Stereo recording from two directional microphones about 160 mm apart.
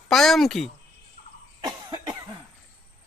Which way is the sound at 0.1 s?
Centre (ahead or behind).